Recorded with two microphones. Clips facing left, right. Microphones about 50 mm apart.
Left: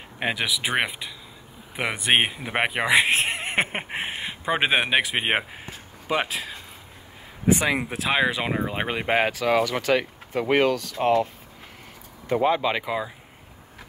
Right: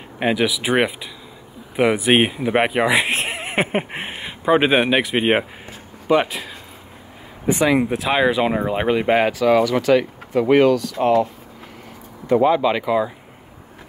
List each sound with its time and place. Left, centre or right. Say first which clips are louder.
0.2 s speech: right 6 dB; centre
9.7 s speech: right 7 dB; left
12.4 s speech: right 5 dB; centre